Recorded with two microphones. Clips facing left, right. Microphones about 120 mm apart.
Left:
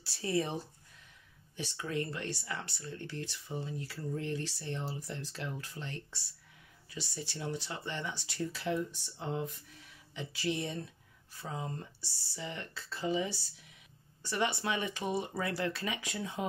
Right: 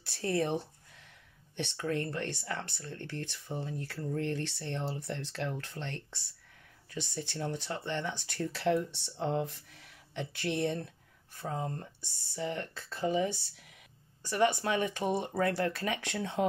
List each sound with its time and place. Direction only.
0.0 s speech: 55° right (ahead or behind)
1.6 s speech: 55° right (ahead or behind)
6.9 s speech: 55° right (ahead or behind)
11.3 s speech: 50° right (ahead or behind)
16.0 s speech: 70° right (ahead or behind)